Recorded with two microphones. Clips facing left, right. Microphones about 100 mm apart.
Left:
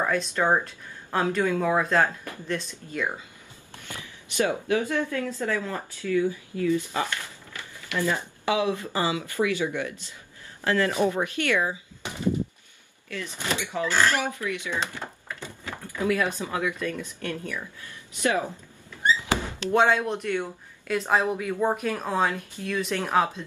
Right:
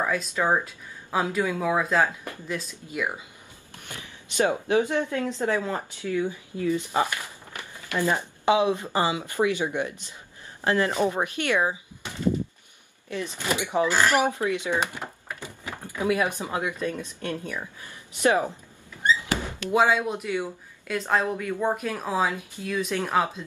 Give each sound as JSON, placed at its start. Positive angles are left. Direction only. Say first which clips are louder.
{"t": 0.0, "sound": "speech", "louder": "left 1 dB", "side_deg": -5}
{"t": 4.4, "sound": "speech", "louder": "right 2 dB", "side_deg": -20}
{"t": 12.0, "sound": "a sound", "louder": "left 2 dB", "side_deg": 20}
{"t": 13.1, "sound": "speech", "louder": "right 2 dB", "side_deg": -20}
{"t": 19.7, "sound": "speech", "louder": "even", "side_deg": -5}